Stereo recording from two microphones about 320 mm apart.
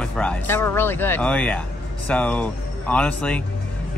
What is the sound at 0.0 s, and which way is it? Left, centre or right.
Speech, centre.